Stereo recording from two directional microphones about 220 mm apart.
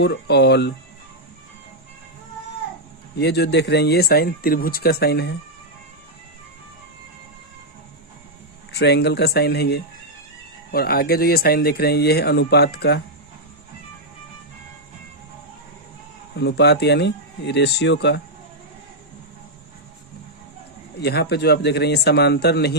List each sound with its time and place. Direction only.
0.0 s speech: 50° left (ahead or behind)
3.2 s speech: 50° left (ahead or behind)
8.7 s speech: 50° left (ahead or behind)
16.4 s speech: 50° left (ahead or behind)
21.0 s speech: 50° left (ahead or behind)